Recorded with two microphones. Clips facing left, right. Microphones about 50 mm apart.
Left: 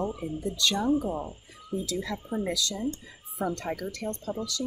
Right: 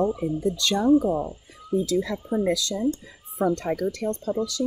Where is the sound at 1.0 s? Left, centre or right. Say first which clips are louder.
Right 7 dB; right.